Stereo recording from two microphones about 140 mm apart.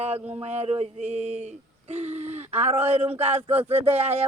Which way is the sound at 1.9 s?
50° right (ahead or behind).